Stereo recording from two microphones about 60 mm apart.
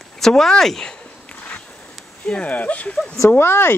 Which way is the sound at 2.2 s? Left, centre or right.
Left.